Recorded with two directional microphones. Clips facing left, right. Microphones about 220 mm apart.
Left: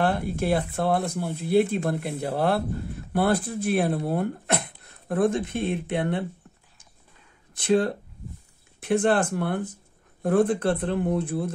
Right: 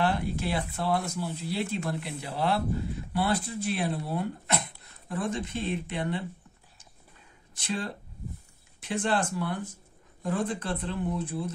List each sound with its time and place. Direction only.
0.0 s speech: 55° left (ahead or behind)
7.5 s speech: 55° left (ahead or behind)